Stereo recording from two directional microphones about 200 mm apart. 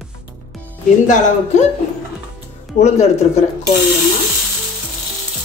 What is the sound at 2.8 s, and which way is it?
Speech, 30° left (ahead or behind).